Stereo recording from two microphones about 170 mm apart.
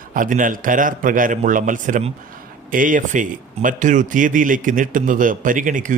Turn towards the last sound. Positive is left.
turn(degrees=-50)  # may be behind; listen again after turning